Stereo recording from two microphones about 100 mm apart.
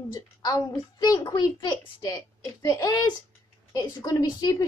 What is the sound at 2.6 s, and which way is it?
A child's voice, 40° left (ahead or behind).